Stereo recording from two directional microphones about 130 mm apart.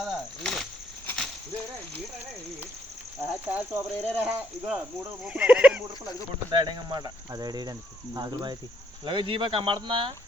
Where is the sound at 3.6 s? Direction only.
10° right (ahead or behind).